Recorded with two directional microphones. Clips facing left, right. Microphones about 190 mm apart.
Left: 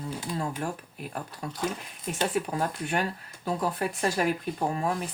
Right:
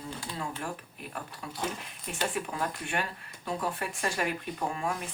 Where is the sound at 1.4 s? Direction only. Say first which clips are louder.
Left 4 dB; 40° left (ahead or behind).